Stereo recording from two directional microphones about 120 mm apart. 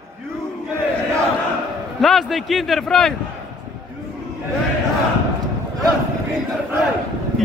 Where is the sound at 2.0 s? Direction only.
Centre (ahead or behind).